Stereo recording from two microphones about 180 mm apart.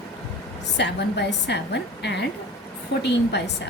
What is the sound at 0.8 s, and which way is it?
A woman's voice, 70° left (ahead or behind).